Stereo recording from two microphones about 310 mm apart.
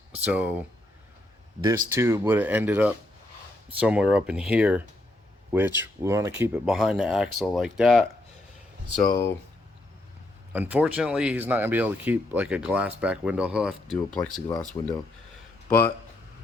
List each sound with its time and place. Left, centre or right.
0.2 s speech: centre
9.0 s speech: left
10.5 s speech: centre